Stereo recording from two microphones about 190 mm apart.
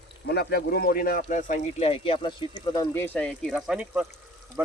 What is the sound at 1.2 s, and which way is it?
Speech, 40° left (ahead or behind).